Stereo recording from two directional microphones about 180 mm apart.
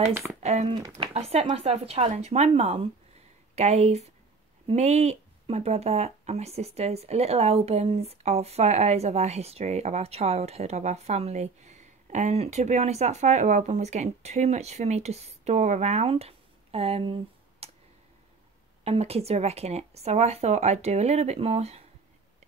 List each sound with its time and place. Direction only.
0.4 s speech: 40° right (ahead or behind)
18.9 s speech: 35° right (ahead or behind)